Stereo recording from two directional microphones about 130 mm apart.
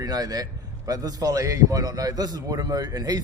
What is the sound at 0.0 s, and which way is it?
A man's voice, 30° right (ahead or behind).